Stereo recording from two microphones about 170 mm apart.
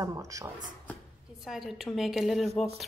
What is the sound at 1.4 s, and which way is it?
A woman's voice, centre (ahead or behind).